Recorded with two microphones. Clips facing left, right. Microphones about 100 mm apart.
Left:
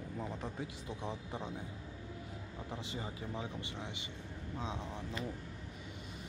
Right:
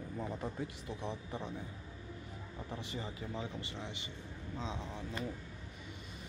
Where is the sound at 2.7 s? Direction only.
20° left (ahead or behind).